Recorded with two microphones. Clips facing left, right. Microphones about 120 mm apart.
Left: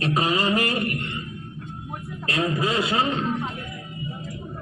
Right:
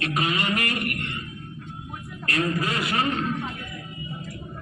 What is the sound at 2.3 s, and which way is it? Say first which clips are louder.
A man's voice: left 2 dB; 20° left (ahead or behind).